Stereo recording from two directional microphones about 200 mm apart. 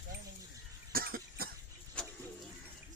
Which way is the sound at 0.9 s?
50° right (ahead or behind).